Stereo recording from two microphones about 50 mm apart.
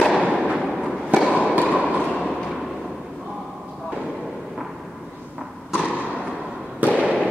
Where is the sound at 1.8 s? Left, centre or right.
Left.